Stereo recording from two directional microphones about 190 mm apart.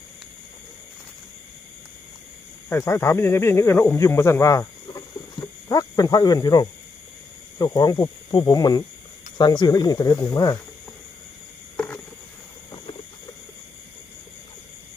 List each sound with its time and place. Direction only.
2.6 s speech: 15° left (ahead or behind)